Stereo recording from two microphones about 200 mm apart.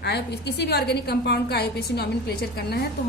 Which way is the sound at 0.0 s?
55° left (ahead or behind).